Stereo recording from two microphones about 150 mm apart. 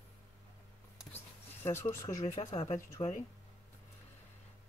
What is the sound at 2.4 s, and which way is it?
Speech, 35° left (ahead or behind).